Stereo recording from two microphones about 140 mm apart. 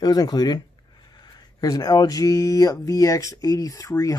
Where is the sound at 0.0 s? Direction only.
30° left (ahead or behind).